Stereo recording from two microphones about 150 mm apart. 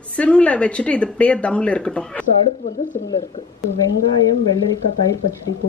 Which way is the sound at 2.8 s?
60° left (ahead or behind).